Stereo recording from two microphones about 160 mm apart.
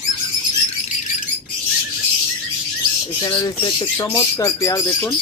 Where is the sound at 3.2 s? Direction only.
30° left (ahead or behind).